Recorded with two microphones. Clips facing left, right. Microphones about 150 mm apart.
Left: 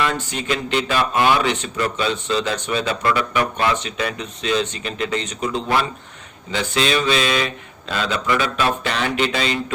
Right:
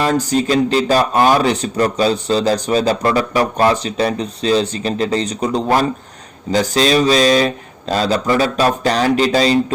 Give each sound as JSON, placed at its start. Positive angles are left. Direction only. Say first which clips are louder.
{"t": 0.0, "sound": "speech", "louder": "right 7 dB", "side_deg": -40}